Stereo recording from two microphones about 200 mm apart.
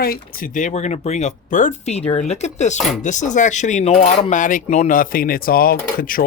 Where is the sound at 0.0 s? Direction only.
45° left (ahead or behind).